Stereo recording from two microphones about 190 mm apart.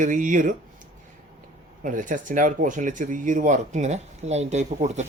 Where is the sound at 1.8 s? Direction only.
45° right (ahead or behind).